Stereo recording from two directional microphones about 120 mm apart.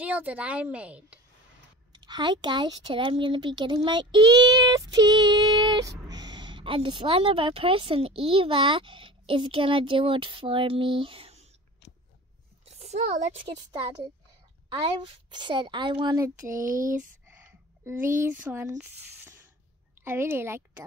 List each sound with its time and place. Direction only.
0.0 s a woman's voice: 10° right (ahead or behind)
1.9 s a woman's voice: 35° right (ahead or behind); by 11.4 s 50° right (ahead or behind)
12.6 s a sound: 65° right (ahead or behind)
15.0 s speech: 40° right (ahead or behind)
17.3 s speech: 15° right (ahead or behind)
20.0 s a woman's voice: 20° right (ahead or behind)